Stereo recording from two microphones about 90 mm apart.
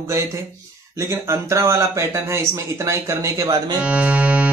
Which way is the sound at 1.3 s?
30° right (ahead or behind).